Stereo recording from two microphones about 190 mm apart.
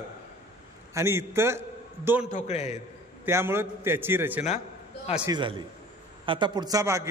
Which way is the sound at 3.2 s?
10° right (ahead or behind).